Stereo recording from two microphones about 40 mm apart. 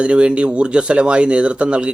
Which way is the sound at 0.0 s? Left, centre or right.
Right.